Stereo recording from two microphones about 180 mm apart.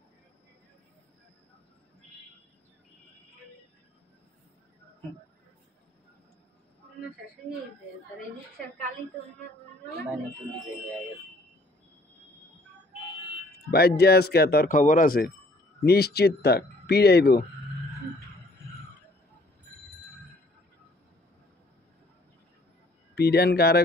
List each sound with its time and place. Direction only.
13.7 s speech: 60° left (ahead or behind)
23.1 s speech: 60° left (ahead or behind)